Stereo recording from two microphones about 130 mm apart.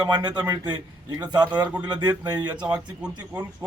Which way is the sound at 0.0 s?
35° right (ahead or behind).